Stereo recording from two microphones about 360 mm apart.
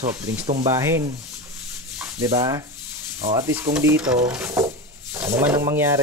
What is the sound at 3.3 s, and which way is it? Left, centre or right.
Stir, centre.